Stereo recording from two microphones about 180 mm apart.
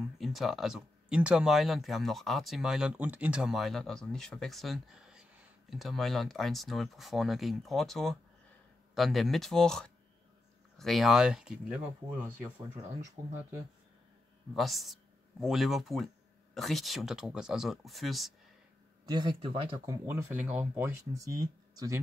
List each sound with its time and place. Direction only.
0.2 s speech: centre (ahead or behind)
14.5 s speech: centre (ahead or behind)
19.0 s speech: 25° right (ahead or behind)
20.1 s speech: 15° right (ahead or behind)